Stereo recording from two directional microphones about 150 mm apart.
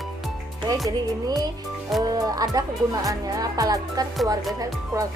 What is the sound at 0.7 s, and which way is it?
Music, 25° right (ahead or behind).